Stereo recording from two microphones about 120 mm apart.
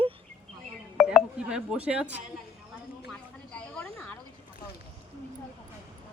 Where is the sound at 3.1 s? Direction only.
5° left (ahead or behind).